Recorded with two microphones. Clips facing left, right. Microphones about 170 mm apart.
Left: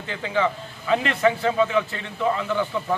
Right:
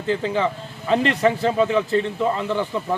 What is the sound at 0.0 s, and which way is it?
A man's voice, 35° right (ahead or behind).